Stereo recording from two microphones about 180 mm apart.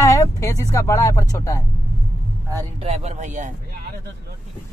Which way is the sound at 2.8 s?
40° right (ahead or behind).